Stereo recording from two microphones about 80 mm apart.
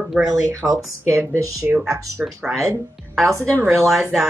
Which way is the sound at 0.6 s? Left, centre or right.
Right.